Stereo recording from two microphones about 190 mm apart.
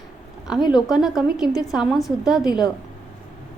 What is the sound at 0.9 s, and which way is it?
A woman's voice, centre (ahead or behind).